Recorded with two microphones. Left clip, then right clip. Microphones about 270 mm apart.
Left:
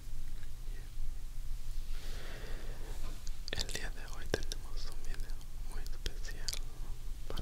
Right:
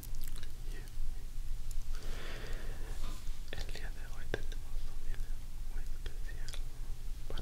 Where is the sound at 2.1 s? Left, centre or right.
Centre.